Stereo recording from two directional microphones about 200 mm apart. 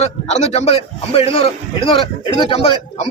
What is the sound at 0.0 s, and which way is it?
A man's voice, 35° left (ahead or behind).